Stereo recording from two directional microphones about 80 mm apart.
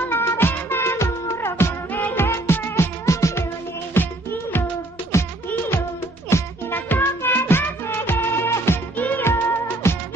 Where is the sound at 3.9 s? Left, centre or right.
Left.